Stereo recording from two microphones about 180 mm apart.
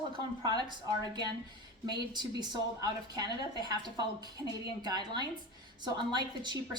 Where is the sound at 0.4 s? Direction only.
25° right (ahead or behind).